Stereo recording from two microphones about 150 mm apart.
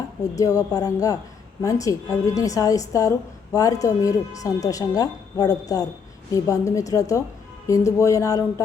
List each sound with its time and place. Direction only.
0.3 s a woman's voice: 25° left (ahead or behind)